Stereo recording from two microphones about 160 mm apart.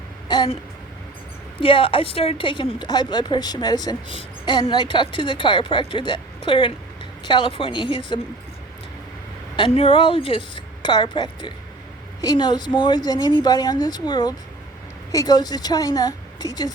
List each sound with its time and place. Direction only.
0.3 s a sound: 30° left (ahead or behind)
1.6 s a woman's voice: 35° left (ahead or behind)
9.6 s a woman's voice: 35° left (ahead or behind)